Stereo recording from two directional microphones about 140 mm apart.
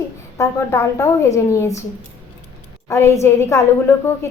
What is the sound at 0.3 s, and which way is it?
A woman's voice, 20° left (ahead or behind).